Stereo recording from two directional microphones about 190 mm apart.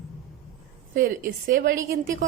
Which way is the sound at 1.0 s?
50° right (ahead or behind).